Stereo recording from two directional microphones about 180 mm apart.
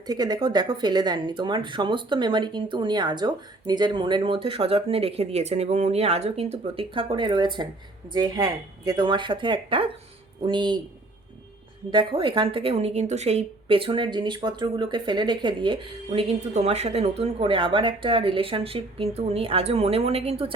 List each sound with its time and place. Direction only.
0.1 s speech: 20° right (ahead or behind)
11.9 s a woman's voice: 25° right (ahead or behind)